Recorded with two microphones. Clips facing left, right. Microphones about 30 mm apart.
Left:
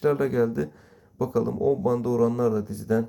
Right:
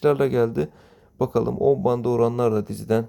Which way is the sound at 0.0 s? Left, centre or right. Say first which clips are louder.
Right 3 dB; right.